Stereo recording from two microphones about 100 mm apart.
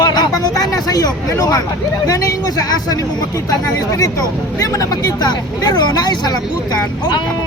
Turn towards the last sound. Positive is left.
turn(degrees=45)  # may be behind; listen again after turning